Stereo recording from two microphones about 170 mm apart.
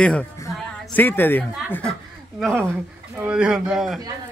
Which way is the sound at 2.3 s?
Centre (ahead or behind).